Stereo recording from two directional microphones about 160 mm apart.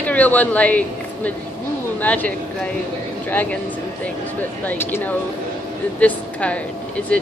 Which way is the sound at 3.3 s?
10° left (ahead or behind).